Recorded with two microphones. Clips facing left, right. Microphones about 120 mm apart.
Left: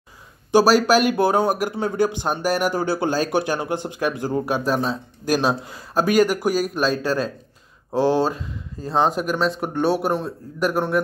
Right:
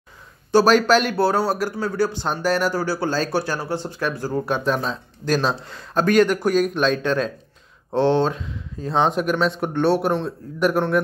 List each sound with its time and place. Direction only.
0.5 s speech: 10° left (ahead or behind)